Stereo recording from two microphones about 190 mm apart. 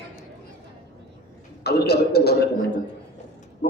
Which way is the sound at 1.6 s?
55° left (ahead or behind).